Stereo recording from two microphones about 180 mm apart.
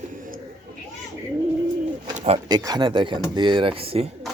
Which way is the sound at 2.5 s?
20° right (ahead or behind).